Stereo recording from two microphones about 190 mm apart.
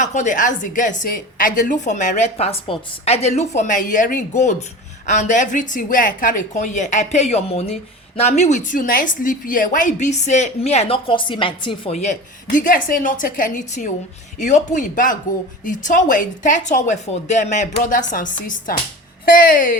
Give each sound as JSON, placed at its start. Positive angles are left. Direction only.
{"t": 0.0, "sound": "a woman's voice", "side_deg": 40}